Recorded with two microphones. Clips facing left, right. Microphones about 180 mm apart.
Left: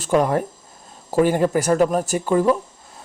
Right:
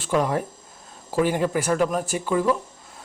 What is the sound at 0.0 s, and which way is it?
A man's voice, 45° left (ahead or behind).